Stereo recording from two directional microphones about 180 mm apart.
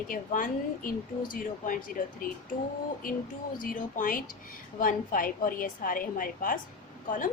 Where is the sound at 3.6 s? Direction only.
50° left (ahead or behind).